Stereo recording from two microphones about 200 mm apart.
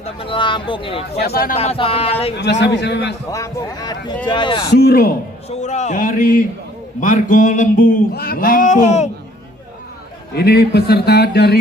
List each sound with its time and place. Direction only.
0.0 s speech: 25° left (ahead or behind)
1.2 s speech: 50° left (ahead or behind)
1.6 s speech: 30° left (ahead or behind)
2.6 s a man's voice: 60° left (ahead or behind)
3.3 s speech: 15° left (ahead or behind)
4.7 s speech: 50° left (ahead or behind)
5.5 s a sound: 35° left (ahead or behind)
10.3 s speech: 50° left (ahead or behind)